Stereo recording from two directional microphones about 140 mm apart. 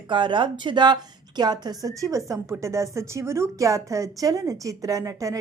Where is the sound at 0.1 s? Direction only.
35° right (ahead or behind).